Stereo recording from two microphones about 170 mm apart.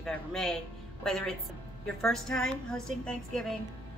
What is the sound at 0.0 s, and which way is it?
Speech, 5° left (ahead or behind).